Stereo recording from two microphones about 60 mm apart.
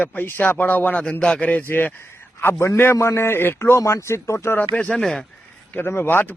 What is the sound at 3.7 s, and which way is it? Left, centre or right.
Speech, left.